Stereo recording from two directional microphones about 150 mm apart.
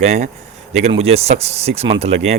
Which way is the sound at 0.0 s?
45° right (ahead or behind).